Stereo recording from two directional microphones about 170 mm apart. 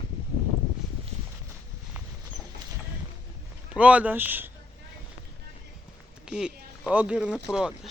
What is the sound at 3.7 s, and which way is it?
Speech, 5° right (ahead or behind).